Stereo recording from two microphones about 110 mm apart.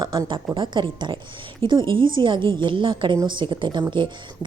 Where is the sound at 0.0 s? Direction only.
45° right (ahead or behind).